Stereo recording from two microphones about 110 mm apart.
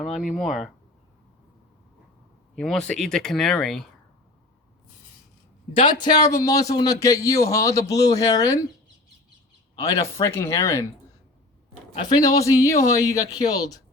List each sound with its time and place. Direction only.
0.0 s speech: centre (ahead or behind)
2.6 s speech: 5° left (ahead or behind)
5.7 s a man's voice: 45° left (ahead or behind)
9.8 s speech: 25° left (ahead or behind)
12.0 s a man's voice: 35° left (ahead or behind)